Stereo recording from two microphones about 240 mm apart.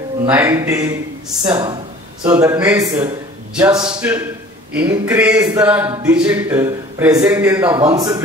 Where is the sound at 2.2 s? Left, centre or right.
Centre.